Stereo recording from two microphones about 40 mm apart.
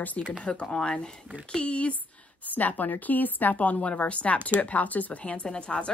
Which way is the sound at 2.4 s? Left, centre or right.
Left.